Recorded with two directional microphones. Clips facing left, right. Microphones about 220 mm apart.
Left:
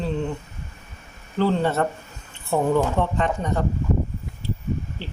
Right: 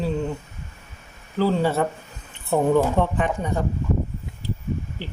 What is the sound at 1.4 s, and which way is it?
Speech, 5° right (ahead or behind).